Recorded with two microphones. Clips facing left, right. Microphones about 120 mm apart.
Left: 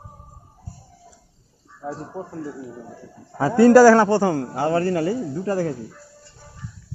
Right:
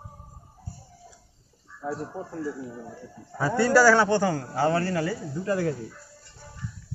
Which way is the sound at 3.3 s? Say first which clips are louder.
Left 8 dB; 45° left (ahead or behind).